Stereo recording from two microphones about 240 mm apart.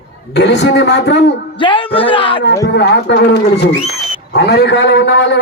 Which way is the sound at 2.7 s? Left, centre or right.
Left.